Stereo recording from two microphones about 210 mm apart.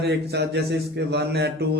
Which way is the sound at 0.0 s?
55° right (ahead or behind).